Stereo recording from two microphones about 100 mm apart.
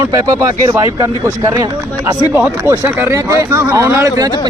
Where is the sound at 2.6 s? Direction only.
25° right (ahead or behind).